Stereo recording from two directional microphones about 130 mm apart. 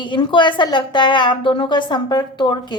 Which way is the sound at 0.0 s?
40° left (ahead or behind).